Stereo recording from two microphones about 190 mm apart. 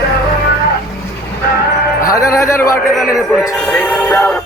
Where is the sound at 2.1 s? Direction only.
15° left (ahead or behind).